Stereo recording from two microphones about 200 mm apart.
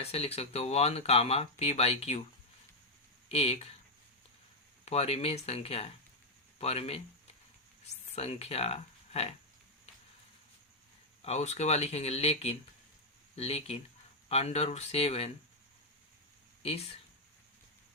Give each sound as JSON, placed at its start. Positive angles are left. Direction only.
{"t": 0.0, "sound": "speech", "side_deg": 30}
{"t": 3.2, "sound": "speech", "side_deg": 30}
{"t": 4.9, "sound": "speech", "side_deg": 30}
{"t": 8.1, "sound": "speech", "side_deg": 30}
{"t": 11.2, "sound": "speech", "side_deg": 35}
{"t": 16.6, "sound": "speech", "side_deg": 30}